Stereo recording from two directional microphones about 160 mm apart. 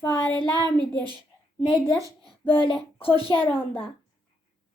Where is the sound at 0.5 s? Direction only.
25° right (ahead or behind).